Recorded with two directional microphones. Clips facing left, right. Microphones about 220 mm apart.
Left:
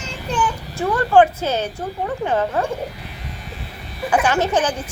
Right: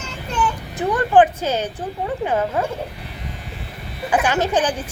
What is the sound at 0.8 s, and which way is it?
A woman's voice, 20° right (ahead or behind).